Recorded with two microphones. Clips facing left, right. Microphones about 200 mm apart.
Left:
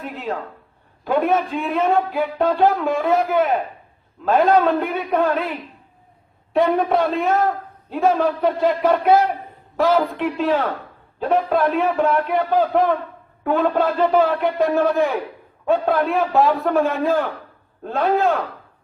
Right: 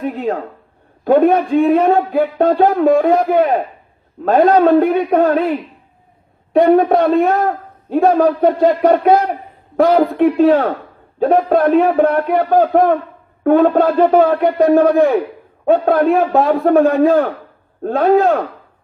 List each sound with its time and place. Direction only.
0.1 s a sound: 50° right (ahead or behind)
1.0 s a man's voice: 40° right (ahead or behind)
4.6 s a man's voice: 50° right (ahead or behind)
6.5 s a man's voice: 55° right (ahead or behind)
17.0 s a man's voice: 55° right (ahead or behind)